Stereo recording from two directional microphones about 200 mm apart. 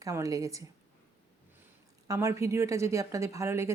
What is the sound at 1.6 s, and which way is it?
A woman's voice, 15° right (ahead or behind).